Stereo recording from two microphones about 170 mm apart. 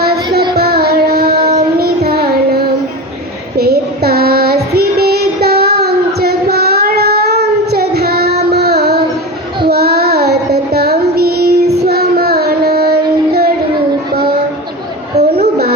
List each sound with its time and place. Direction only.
0.5 s child singing: 65° right (ahead or behind)
3.6 s child singing: 65° right (ahead or behind)
15.1 s a sound: 40° right (ahead or behind)